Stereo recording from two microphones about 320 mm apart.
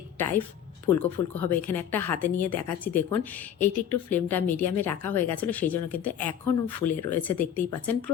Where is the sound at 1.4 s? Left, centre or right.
Centre.